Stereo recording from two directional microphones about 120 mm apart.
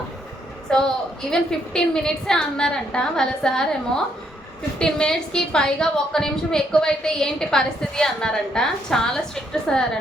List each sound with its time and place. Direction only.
0.7 s a woman's voice: 5° left (ahead or behind)